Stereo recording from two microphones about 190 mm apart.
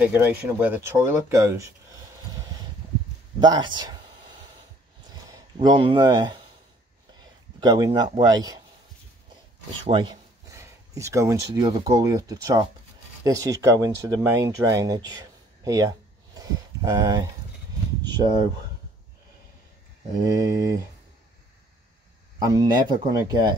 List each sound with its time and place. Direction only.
0.0 s speech: 10° right (ahead or behind)
3.3 s speech: 25° right (ahead or behind)
5.3 s speech: 20° right (ahead or behind)
7.6 s speech: 20° right (ahead or behind)
9.8 s speech: 25° right (ahead or behind)
10.5 s speech: 15° right (ahead or behind)
20.3 s speech: 20° right (ahead or behind)
22.4 s speech: 20° right (ahead or behind)